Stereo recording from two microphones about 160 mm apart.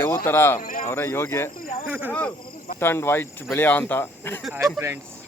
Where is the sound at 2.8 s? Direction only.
15° left (ahead or behind).